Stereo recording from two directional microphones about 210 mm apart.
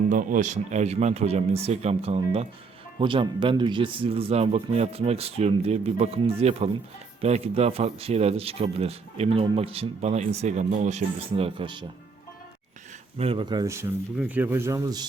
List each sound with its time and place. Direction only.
0.1 s speech: 40° right (ahead or behind); by 11.9 s 20° right (ahead or behind)
13.1 s speech: 25° right (ahead or behind)